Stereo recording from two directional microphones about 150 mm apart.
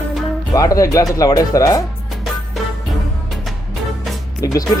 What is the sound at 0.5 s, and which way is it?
Speech, 20° left (ahead or behind).